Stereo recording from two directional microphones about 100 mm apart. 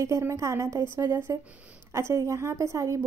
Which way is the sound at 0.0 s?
30° right (ahead or behind).